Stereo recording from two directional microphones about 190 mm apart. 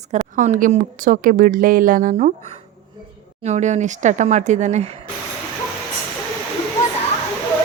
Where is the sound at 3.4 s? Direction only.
40° right (ahead or behind).